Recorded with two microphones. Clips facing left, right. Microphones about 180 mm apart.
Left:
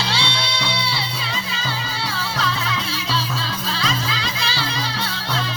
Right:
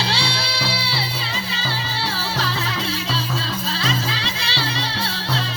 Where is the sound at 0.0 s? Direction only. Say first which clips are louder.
Even; 35° right (ahead or behind).